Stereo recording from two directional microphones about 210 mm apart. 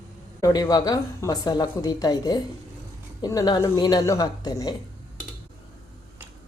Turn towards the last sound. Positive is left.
turn(degrees=15)  # may be behind; listen again after turning